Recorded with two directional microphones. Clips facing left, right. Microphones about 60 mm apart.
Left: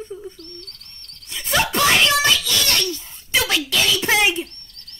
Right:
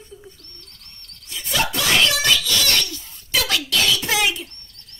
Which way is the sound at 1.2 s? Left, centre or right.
Left.